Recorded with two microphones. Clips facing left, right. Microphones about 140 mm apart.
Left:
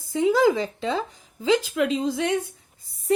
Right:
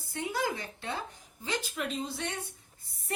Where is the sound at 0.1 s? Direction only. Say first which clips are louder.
Left 14 dB; 90° left.